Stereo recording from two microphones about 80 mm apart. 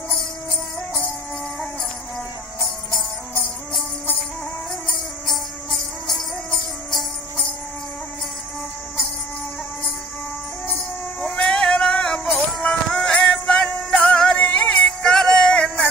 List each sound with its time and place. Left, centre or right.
4.9 s music: centre
11.1 s a sound: centre
12.3 s music: centre
14.8 s music: centre